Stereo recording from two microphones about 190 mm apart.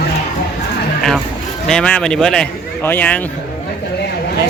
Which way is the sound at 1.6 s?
5° left (ahead or behind).